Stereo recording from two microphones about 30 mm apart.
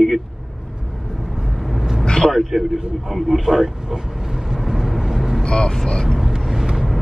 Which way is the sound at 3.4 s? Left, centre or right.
Centre.